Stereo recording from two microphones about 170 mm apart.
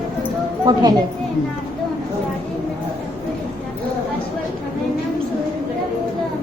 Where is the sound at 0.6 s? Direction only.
25° right (ahead or behind).